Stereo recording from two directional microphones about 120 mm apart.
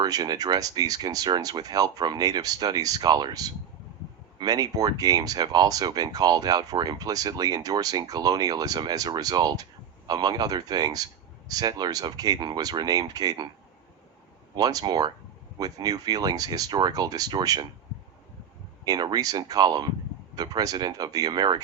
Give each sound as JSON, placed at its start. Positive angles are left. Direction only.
{"t": 0.0, "sound": "speech", "side_deg": -35}
{"t": 14.5, "sound": "speech", "side_deg": -35}
{"t": 18.9, "sound": "speech", "side_deg": -35}